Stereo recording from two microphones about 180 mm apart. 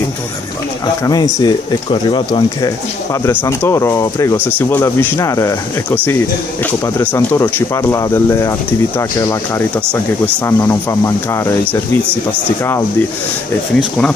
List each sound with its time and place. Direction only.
1.0 s speech: 20° left (ahead or behind)
12.4 s speech: 15° left (ahead or behind)